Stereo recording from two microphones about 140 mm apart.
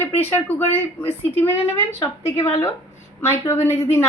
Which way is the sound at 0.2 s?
15° left (ahead or behind).